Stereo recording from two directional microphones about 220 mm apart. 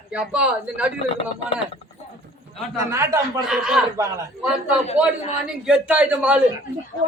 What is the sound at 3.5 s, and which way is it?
A man's voice, centre (ahead or behind).